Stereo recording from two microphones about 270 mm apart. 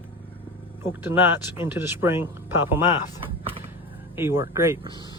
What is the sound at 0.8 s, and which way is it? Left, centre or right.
Speech, centre.